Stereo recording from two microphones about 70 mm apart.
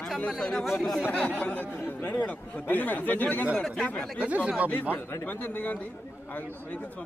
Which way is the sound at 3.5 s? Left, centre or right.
Centre.